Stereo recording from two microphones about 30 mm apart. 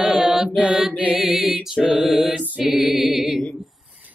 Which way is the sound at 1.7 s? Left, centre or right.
Right.